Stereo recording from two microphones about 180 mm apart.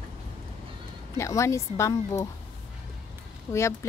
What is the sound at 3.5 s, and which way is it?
Speech, 15° left (ahead or behind).